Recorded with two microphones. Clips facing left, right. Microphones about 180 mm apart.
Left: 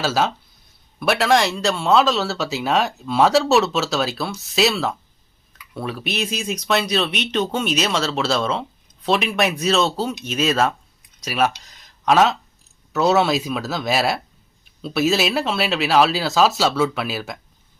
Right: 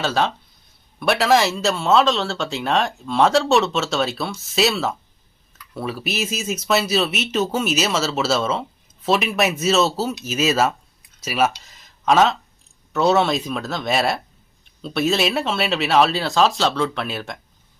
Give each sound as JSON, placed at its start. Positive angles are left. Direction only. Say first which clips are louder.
{"t": 0.0, "sound": "speech", "louder": "even", "side_deg": 5}